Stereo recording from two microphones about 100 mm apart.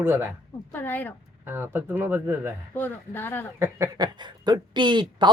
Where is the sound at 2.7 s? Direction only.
20° left (ahead or behind).